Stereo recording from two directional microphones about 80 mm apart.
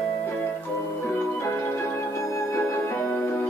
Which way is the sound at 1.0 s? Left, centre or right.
Left.